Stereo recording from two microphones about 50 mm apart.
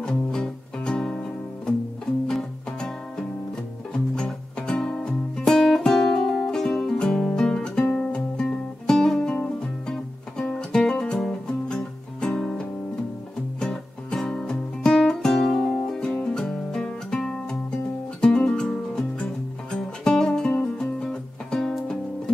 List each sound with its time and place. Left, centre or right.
0.0 s music: centre
2.2 s music: centre